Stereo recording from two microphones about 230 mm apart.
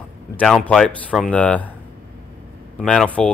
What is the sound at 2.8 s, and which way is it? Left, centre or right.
Speech, centre.